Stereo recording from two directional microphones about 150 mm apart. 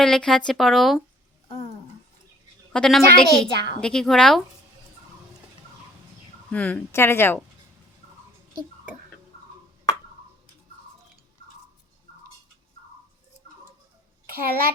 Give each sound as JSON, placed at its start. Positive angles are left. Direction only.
{"t": 0.0, "sound": "a child's voice", "side_deg": 5}
{"t": 2.7, "sound": "a child's voice", "side_deg": 5}
{"t": 6.5, "sound": "speech", "side_deg": 10}
{"t": 14.3, "sound": "a child's voice", "side_deg": -80}